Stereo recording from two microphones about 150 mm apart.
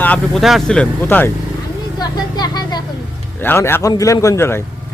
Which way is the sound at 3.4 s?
15° left (ahead or behind).